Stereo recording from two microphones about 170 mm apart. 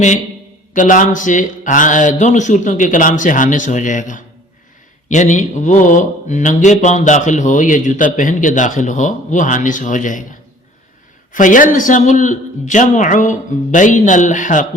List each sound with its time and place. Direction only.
0.7 s speech: 50° left (ahead or behind)
11.3 s speech: 50° left (ahead or behind)